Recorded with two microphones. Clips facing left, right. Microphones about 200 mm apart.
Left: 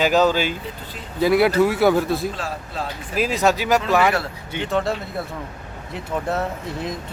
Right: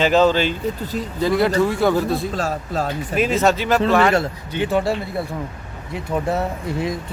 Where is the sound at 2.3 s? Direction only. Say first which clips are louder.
Right 6 dB; 45° right (ahead or behind).